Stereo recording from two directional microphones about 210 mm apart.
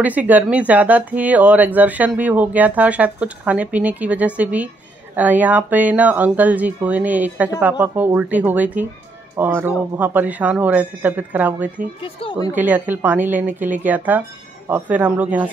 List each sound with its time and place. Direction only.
0.0 s speech: 5° right (ahead or behind)
12.0 s speech: 25° left (ahead or behind)
12.5 s speech: 10° right (ahead or behind)